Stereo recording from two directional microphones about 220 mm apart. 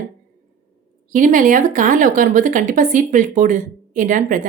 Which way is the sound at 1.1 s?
35° right (ahead or behind).